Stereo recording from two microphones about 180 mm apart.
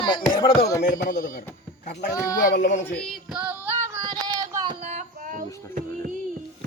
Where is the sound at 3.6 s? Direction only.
15° right (ahead or behind).